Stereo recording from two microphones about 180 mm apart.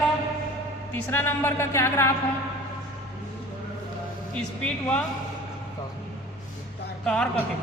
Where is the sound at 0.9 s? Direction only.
10° left (ahead or behind).